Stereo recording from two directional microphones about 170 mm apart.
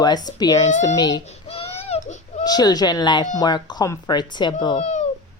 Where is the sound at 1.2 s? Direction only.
35° left (ahead or behind).